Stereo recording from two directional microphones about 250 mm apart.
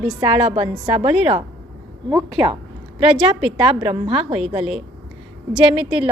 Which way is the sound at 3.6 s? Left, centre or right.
Right.